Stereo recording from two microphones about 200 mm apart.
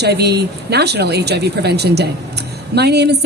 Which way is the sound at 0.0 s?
55° right (ahead or behind).